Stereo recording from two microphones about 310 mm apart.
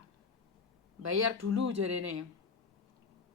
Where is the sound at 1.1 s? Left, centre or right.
Right.